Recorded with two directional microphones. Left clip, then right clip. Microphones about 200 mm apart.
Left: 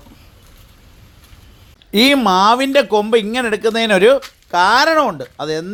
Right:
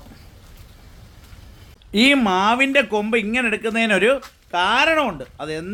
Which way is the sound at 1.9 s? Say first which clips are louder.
Left 4 dB; 25° left (ahead or behind).